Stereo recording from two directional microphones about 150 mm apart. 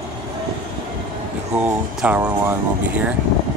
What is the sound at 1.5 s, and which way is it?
Speech, 10° right (ahead or behind).